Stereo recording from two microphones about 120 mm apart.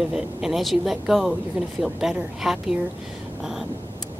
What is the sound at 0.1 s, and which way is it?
Speech, 5° right (ahead or behind).